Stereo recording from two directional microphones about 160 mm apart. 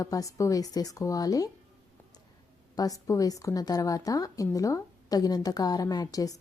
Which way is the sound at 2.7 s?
20° left (ahead or behind).